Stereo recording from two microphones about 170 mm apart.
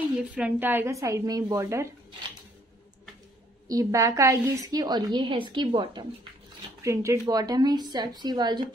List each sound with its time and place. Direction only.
0.2 s speech: 10° right (ahead or behind)
3.6 s a woman's voice: 20° right (ahead or behind)
6.8 s a woman's voice: 15° right (ahead or behind)